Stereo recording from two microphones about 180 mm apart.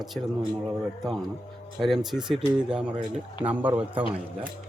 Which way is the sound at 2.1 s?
5° right (ahead or behind).